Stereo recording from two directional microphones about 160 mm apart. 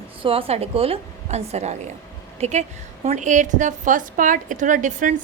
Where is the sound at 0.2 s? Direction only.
35° right (ahead or behind).